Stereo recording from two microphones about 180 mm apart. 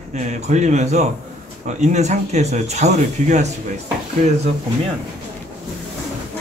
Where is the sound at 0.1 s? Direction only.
40° right (ahead or behind).